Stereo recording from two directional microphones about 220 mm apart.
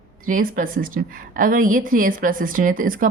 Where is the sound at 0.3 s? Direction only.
40° right (ahead or behind).